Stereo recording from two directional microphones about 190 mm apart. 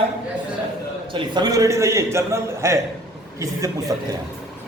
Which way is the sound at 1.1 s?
25° right (ahead or behind).